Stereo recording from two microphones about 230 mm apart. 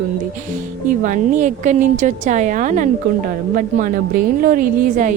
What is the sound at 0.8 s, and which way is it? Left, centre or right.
A woman's voice, right.